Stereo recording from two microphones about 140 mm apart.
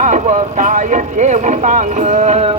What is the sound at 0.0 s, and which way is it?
Speech, 60° right (ahead or behind).